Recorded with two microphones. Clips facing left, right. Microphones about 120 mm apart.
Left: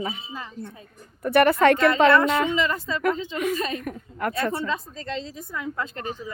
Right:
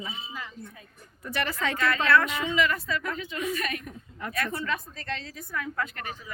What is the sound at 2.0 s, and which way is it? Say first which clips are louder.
Speech: left 9 dB; 70° left (ahead or behind).